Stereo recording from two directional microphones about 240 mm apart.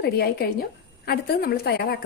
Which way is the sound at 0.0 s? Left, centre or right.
Left.